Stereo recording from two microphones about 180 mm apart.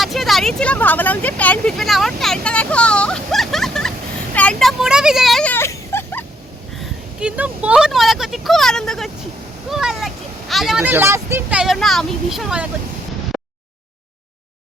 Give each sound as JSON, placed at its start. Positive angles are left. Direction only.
{"t": 0.0, "sound": "speech", "side_deg": 0}
{"t": 4.4, "sound": "a sound", "side_deg": 5}
{"t": 7.2, "sound": "speech", "side_deg": -5}